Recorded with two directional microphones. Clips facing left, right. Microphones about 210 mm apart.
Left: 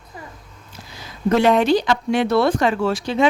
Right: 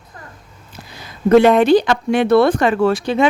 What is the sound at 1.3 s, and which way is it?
Speech, 55° right (ahead or behind).